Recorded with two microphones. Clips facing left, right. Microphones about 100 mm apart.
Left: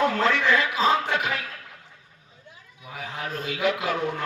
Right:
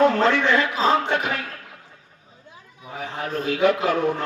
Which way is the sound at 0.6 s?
40° right (ahead or behind).